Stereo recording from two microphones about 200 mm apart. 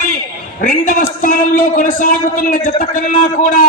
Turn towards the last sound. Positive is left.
turn(degrees=45)  # may be behind; listen again after turning